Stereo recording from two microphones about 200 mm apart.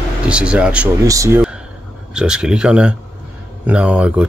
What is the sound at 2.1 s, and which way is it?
Speech, 5° right (ahead or behind).